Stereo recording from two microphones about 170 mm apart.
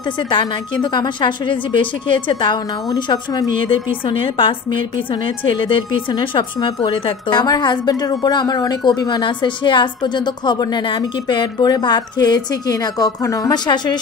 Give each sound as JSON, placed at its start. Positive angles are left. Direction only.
{"t": 0.3, "sound": "a woman's voice", "side_deg": 25}